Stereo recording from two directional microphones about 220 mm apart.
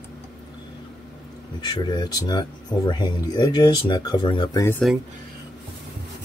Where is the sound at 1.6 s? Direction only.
20° left (ahead or behind).